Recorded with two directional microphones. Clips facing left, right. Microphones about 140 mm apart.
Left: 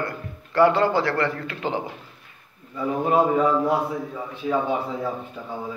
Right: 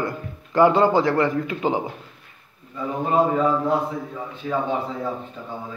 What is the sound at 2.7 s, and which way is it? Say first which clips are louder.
A man's voice: left 1 dB; 10° left (ahead or behind).